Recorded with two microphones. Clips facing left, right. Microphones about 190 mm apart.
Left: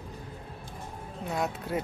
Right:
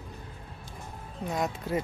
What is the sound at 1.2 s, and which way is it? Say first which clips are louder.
Speech: right 1 dB; centre (ahead or behind).